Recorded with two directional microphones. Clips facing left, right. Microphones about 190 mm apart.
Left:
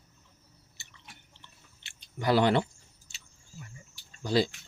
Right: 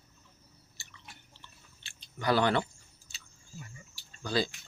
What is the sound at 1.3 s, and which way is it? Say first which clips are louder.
Chewing: right 1 dB; 25° left (ahead or behind).